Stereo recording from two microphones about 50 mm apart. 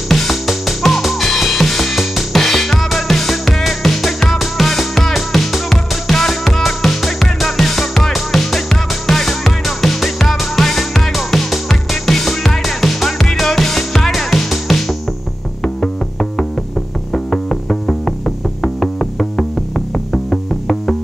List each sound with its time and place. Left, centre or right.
0.1 s music: centre
15.6 s music: centre